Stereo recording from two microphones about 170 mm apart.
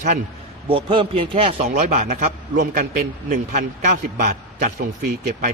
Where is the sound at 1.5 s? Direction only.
45° right (ahead or behind).